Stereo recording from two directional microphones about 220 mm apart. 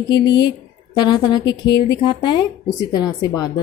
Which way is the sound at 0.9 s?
20° left (ahead or behind).